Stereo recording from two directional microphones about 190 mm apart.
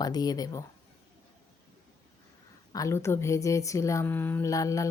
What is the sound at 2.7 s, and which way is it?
Speech, 15° left (ahead or behind).